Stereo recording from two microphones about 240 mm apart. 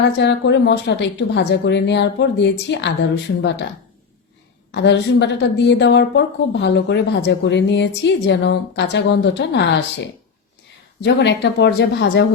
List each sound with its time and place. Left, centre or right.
0.0 s a woman's voice: left
4.7 s a woman's voice: left